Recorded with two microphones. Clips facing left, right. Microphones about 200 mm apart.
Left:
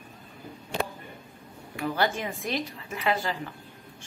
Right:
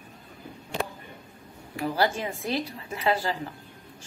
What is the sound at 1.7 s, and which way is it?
A woman's voice, 30° right (ahead or behind).